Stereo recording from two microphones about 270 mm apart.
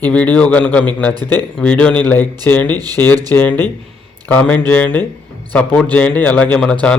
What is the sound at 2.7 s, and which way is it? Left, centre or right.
Speech, centre.